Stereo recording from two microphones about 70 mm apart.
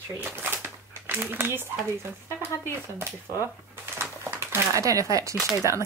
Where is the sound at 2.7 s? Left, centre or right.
Right.